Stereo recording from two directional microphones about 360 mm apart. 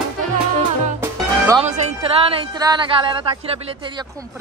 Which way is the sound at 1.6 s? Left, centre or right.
Centre.